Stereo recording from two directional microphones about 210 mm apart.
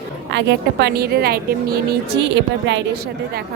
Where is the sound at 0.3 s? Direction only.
55° right (ahead or behind).